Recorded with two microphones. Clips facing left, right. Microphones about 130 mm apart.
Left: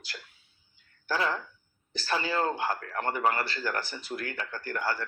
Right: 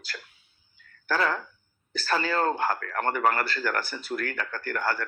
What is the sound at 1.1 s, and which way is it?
Speech, 50° right (ahead or behind).